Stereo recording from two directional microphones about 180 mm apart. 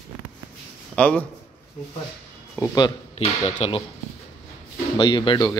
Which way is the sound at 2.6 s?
10° left (ahead or behind).